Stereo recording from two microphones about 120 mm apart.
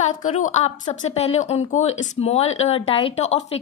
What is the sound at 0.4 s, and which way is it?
A woman's voice, 70° left (ahead or behind).